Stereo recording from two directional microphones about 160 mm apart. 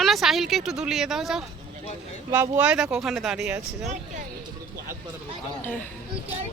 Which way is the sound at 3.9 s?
50° right (ahead or behind).